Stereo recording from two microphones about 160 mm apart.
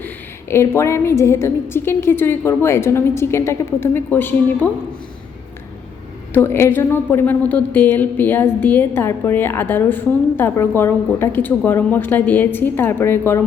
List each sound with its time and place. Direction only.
0.5 s a woman's voice: 15° left (ahead or behind)
6.3 s a woman's voice: 15° left (ahead or behind)